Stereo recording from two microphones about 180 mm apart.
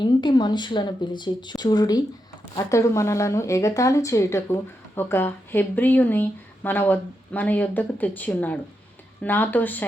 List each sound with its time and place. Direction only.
0.0 s speech: 25° left (ahead or behind)